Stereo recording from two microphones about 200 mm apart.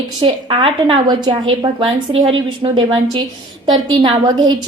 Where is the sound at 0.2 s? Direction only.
25° right (ahead or behind).